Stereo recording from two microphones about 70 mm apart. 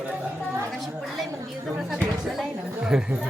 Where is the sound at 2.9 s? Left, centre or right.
Centre.